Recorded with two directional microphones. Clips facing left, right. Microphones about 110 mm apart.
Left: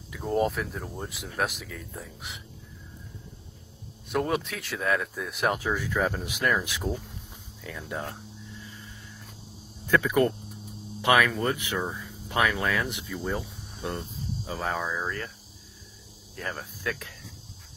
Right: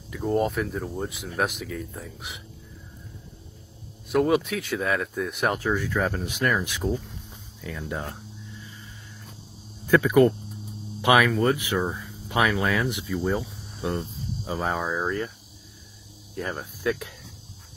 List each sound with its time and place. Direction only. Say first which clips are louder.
0.1 s speech: right 2 dB; centre (ahead or behind)
4.1 s speech: right 6 dB; centre (ahead or behind)
9.8 s cricket: right 5 dB; 10° right (ahead or behind)
11.0 s speech: right 3 dB; 15° right (ahead or behind)
13.9 s speech: right 3 dB; 25° right (ahead or behind)
15.0 s cricket: right 5 dB; 15° right (ahead or behind)
16.5 s cricket: right 6 dB; 15° right (ahead or behind)